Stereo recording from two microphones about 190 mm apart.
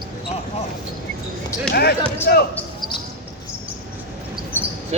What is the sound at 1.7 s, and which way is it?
Basketball bounce, 60° left (ahead or behind).